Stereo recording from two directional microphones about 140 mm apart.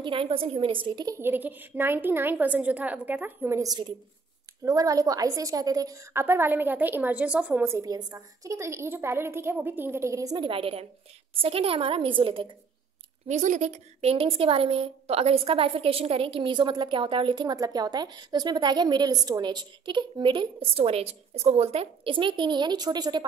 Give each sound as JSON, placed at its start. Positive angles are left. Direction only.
{"t": 0.0, "sound": "a woman's voice", "side_deg": -40}
{"t": 1.1, "sound": "a woman's voice", "side_deg": -15}
{"t": 13.3, "sound": "a woman's voice", "side_deg": -60}